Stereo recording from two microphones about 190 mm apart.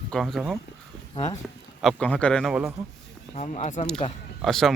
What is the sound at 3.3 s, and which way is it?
Speech, 35° left (ahead or behind).